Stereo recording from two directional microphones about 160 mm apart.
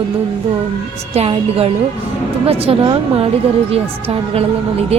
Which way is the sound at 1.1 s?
40° right (ahead or behind).